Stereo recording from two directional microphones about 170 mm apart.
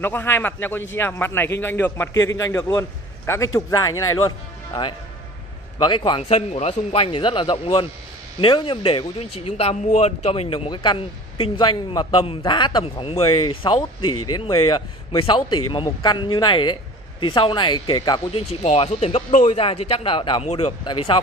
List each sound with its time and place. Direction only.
0.0 s a man's voice: 10° left (ahead or behind)
5.8 s a man's voice: 30° left (ahead or behind)
18.5 s a man's voice: 40° left (ahead or behind)